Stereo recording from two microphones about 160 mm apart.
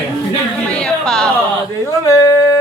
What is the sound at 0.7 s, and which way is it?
Speech, 5° left (ahead or behind).